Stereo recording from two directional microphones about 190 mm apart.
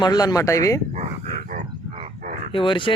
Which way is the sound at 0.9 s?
40° right (ahead or behind).